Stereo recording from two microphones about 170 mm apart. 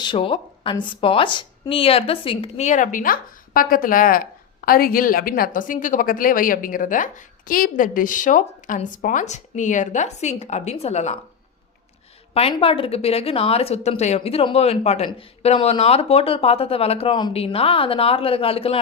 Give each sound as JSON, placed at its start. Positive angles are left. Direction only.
{"t": 0.0, "sound": "a woman's voice", "side_deg": 30}
{"t": 12.3, "sound": "speech", "side_deg": 35}